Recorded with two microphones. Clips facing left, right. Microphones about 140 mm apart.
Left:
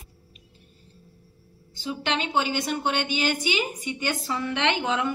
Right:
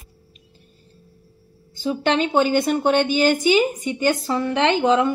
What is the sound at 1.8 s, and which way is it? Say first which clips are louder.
A woman's voice: right 8 dB; 45° right (ahead or behind).